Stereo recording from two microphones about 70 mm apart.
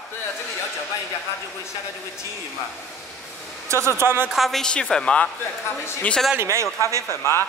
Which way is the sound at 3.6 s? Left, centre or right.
Right.